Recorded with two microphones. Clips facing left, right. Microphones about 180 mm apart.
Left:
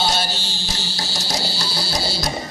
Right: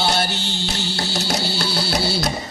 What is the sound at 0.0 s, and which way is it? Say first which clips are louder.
Music: right 2 dB; 60° right (ahead or behind).